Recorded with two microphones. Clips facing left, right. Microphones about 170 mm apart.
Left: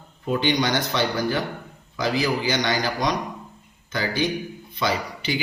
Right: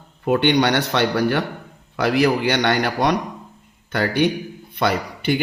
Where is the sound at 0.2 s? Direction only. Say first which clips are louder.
Right 5 dB; 65° right (ahead or behind).